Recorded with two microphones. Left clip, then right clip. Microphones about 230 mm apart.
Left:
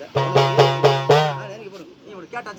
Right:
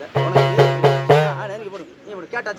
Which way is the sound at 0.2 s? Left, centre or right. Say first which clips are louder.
Even; left.